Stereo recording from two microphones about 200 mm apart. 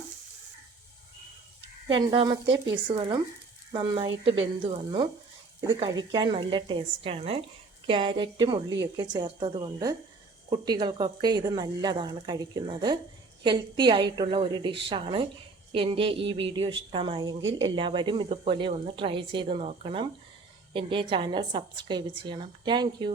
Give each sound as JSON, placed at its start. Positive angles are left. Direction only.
{"t": 1.9, "sound": "a woman's voice", "side_deg": -25}